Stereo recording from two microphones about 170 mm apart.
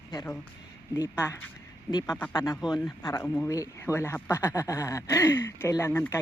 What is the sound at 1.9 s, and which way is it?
Speech, 25° left (ahead or behind).